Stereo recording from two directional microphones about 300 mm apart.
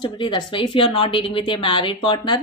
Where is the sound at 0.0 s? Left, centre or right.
Centre.